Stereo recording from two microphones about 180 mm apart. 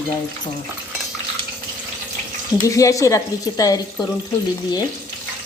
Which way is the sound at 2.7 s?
20° left (ahead or behind).